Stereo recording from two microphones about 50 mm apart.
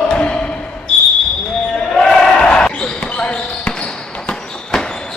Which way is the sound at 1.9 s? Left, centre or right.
Centre.